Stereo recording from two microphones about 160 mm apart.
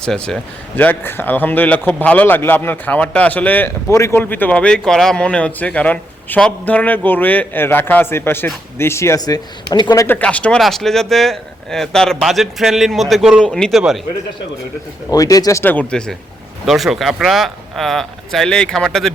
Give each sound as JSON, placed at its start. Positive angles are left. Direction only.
{"t": 0.0, "sound": "a man's voice", "side_deg": 5}
{"t": 10.2, "sound": "speech", "side_deg": 5}
{"t": 15.1, "sound": "a man's voice", "side_deg": 20}